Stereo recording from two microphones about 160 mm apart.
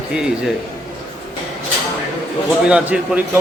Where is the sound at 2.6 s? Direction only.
5° right (ahead or behind).